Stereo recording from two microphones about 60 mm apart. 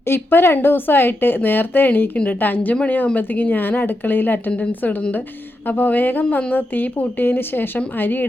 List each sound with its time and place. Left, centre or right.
0.0 s a woman's voice: left